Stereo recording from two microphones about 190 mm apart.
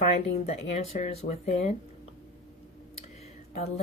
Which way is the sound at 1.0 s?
35° left (ahead or behind).